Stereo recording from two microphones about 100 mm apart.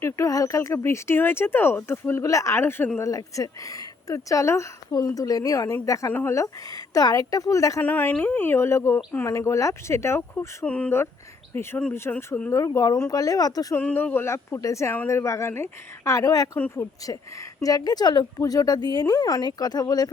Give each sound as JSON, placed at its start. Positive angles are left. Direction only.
{"t": 0.0, "sound": "speech", "side_deg": 35}
{"t": 3.0, "sound": "speech", "side_deg": 35}
{"t": 7.8, "sound": "speech", "side_deg": 20}
{"t": 10.7, "sound": "speech", "side_deg": 10}
{"t": 11.5, "sound": "speech", "side_deg": 25}
{"t": 12.5, "sound": "speech", "side_deg": 30}
{"t": 13.7, "sound": "speech", "side_deg": 20}
{"t": 16.6, "sound": "speech", "side_deg": 20}
{"t": 17.1, "sound": "speech", "side_deg": 35}